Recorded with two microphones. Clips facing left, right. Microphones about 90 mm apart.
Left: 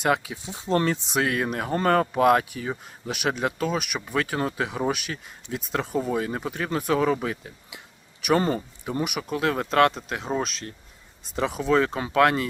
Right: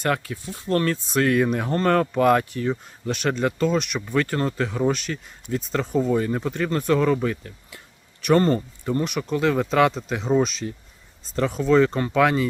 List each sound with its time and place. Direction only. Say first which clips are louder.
0.0 s speech: left 1 dB; 10° left (ahead or behind)
1.3 s speech: right 5 dB; 5° left (ahead or behind)
11.3 s speech: right 4 dB; 10° left (ahead or behind)